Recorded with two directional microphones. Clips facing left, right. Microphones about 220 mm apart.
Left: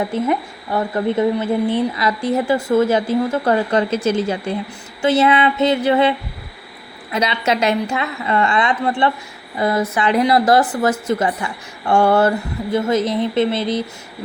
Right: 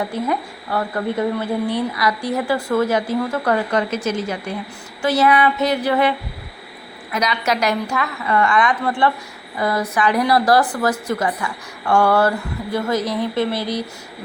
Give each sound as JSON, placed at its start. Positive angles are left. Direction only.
{"t": 0.1, "sound": "speech", "side_deg": 20}